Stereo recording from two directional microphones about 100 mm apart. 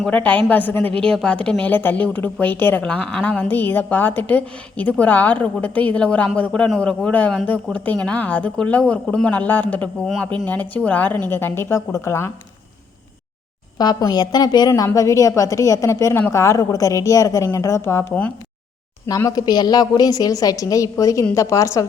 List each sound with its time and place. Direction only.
0.0 s a woman's voice: 15° left (ahead or behind)
13.7 s a woman's voice: 45° left (ahead or behind)
14.9 s a woman's voice: 35° left (ahead or behind)
19.0 s a woman's voice: 35° left (ahead or behind)